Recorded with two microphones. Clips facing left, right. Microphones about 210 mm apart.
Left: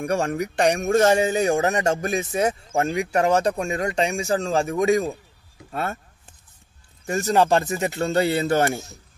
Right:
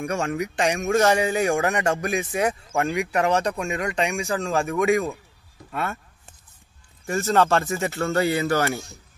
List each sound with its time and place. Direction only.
0.0 s speech: 35° left (ahead or behind)
7.1 s speech: 15° left (ahead or behind)
8.1 s speech: 30° left (ahead or behind)